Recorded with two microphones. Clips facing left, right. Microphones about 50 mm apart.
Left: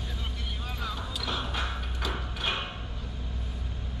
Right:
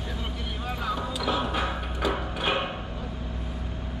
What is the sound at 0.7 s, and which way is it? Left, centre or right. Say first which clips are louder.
Music: right 7 dB; centre.